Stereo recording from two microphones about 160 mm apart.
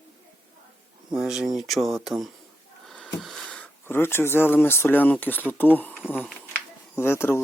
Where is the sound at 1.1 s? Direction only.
5° right (ahead or behind).